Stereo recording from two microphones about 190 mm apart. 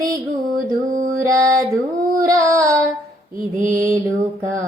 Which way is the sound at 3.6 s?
45° right (ahead or behind).